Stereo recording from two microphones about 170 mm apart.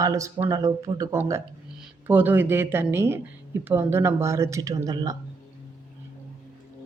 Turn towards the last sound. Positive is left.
turn(degrees=-20)  # may be behind; listen again after turning